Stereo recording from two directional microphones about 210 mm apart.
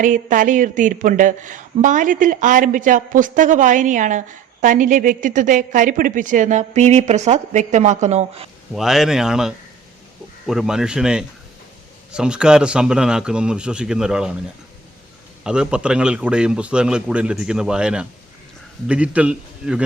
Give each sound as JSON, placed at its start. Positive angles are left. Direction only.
{"t": 0.0, "sound": "a woman's voice", "side_deg": -40}
{"t": 8.7, "sound": "speech", "side_deg": 0}
{"t": 15.4, "sound": "speech", "side_deg": -5}